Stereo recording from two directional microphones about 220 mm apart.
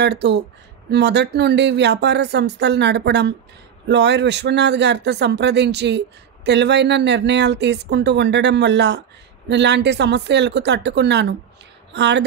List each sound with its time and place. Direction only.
0.0 s speech: 50° right (ahead or behind)